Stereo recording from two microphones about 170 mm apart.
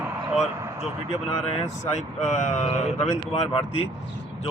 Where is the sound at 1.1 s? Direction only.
40° left (ahead or behind).